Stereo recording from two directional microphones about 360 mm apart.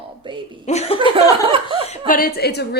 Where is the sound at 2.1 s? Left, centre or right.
Left.